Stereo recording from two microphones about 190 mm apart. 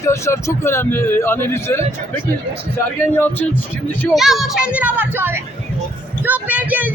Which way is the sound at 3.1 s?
10° left (ahead or behind).